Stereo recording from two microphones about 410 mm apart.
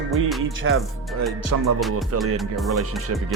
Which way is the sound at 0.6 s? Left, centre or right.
Right.